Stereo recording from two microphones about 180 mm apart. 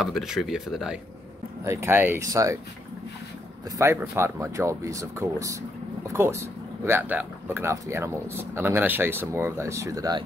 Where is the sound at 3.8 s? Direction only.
15° right (ahead or behind).